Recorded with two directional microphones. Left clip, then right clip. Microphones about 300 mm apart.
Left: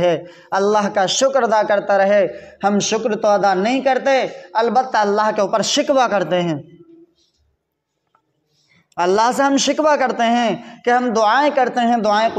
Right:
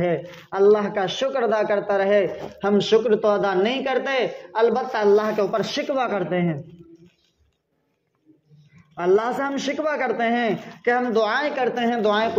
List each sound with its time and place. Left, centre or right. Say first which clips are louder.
0.0 s speech: left 6 dB; left
8.9 s speech: left 5 dB; left